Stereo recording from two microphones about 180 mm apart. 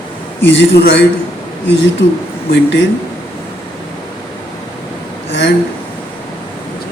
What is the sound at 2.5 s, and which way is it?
Speech, 90° left.